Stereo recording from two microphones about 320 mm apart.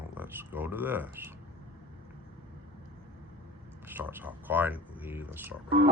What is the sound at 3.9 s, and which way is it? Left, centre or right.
Speech, centre.